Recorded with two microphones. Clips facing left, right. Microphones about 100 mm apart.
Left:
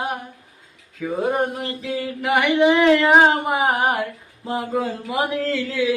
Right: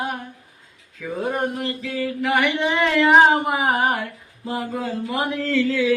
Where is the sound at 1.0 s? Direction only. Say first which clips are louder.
Left 3 dB; 15° left (ahead or behind).